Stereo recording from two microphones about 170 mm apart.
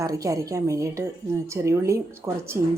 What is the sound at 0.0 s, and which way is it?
A woman's voice, 20° right (ahead or behind).